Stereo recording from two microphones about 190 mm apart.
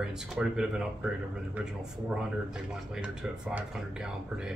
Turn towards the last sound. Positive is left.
turn(degrees=-5)  # may be behind; listen again after turning